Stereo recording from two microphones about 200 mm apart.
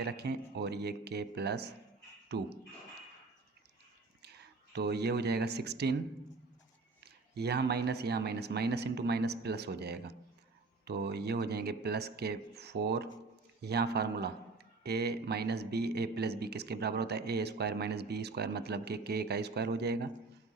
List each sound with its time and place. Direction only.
0.0 s speech: 55° right (ahead or behind)
4.7 s speech: 55° right (ahead or behind)
7.0 s speech: 55° right (ahead or behind)